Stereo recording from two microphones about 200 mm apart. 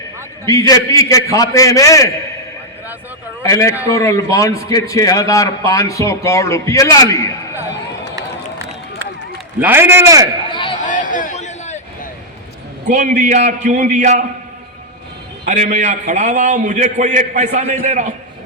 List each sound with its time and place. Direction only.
0.4 s a man's voice: 15° left (ahead or behind)
3.4 s a man's voice: 15° left (ahead or behind)
9.6 s a man's voice: 10° right (ahead or behind)
10.5 s a sound: 25° left (ahead or behind)
10.8 s a sound: 40° left (ahead or behind)
13.0 s a man's voice: 35° right (ahead or behind)
15.4 s a man's voice: 35° right (ahead or behind)